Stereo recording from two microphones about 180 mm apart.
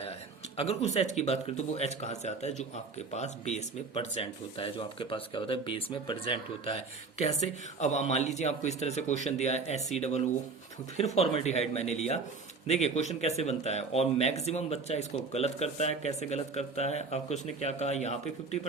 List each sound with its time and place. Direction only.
0.5 s speech: 35° left (ahead or behind)